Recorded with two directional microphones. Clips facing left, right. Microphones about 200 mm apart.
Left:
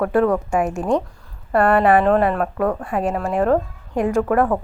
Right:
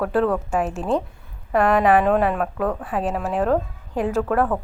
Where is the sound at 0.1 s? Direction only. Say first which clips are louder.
Left 3 dB; 10° left (ahead or behind).